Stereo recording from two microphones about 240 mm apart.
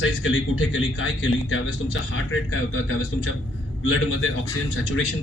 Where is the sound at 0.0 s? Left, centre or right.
Left.